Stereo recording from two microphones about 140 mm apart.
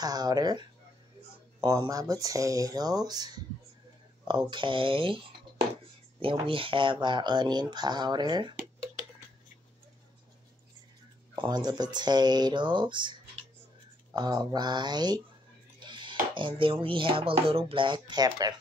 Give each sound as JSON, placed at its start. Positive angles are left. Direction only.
{"t": 0.0, "sound": "speech", "side_deg": -30}
{"t": 6.2, "sound": "speech", "side_deg": -40}
{"t": 11.3, "sound": "speech", "side_deg": -30}
{"t": 15.8, "sound": "music", "side_deg": -35}
{"t": 16.8, "sound": "speech", "side_deg": -40}